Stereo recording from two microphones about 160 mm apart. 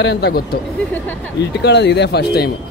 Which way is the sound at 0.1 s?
90° left.